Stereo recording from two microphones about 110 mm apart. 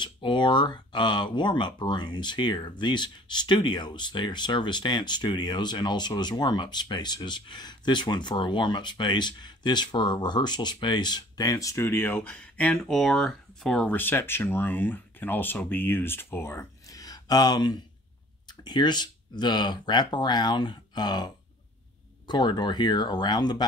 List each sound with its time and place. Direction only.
0.0 s speech: 45° left (ahead or behind); by 13.8 s centre (ahead or behind)
13.8 s speech: 15° left (ahead or behind); by 21.3 s 40° left (ahead or behind)
22.3 s speech: 40° left (ahead or behind)